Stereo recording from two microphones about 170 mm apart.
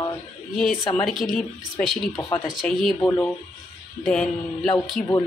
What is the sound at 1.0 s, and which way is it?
A woman's voice, centre (ahead or behind).